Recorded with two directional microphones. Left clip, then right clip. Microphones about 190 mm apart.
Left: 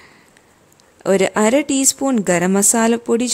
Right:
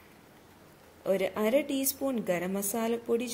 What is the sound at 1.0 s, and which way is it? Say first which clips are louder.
Speech: left 13 dB; 45° left (ahead or behind).